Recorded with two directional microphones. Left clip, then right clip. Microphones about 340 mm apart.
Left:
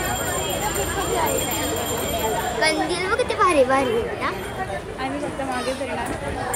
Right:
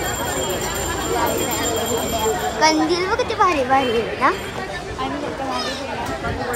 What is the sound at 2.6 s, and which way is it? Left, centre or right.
A child's voice, centre.